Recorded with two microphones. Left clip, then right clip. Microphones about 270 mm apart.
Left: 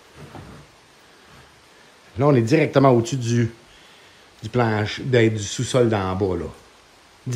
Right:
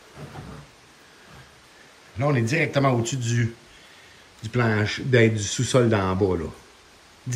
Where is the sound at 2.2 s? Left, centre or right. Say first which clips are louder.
Left 6 dB; centre.